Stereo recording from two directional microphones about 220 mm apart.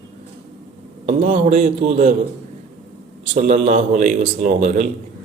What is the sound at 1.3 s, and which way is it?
Speech, 30° right (ahead or behind).